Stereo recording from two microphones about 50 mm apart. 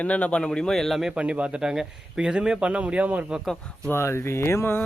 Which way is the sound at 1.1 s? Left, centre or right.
Right.